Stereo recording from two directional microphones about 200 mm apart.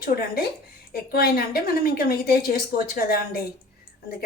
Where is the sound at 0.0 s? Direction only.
50° left (ahead or behind).